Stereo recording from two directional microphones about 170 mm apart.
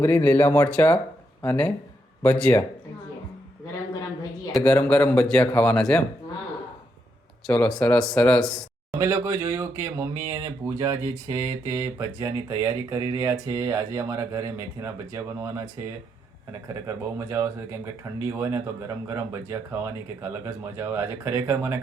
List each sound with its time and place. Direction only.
0.0 s speech: 10° left (ahead or behind)
4.5 s speech: 10° left (ahead or behind)
7.4 s speech: 5° left (ahead or behind)
9.0 s speech: 15° right (ahead or behind)